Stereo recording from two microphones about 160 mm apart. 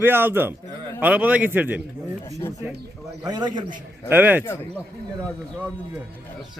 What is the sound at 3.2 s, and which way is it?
Speech, 25° right (ahead or behind).